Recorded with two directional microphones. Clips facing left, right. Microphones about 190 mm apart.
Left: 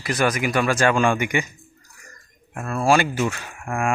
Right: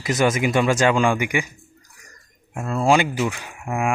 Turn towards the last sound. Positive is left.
turn(degrees=-20)  # may be behind; listen again after turning